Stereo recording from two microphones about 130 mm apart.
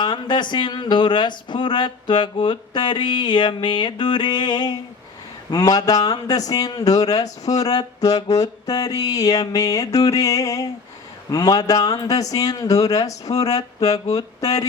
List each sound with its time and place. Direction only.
0.0 s speech: 35° left (ahead or behind)